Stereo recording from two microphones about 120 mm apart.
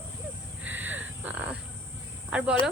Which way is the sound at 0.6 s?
15° right (ahead or behind).